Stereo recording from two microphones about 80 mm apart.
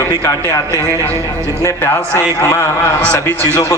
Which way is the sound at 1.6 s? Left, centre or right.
Left.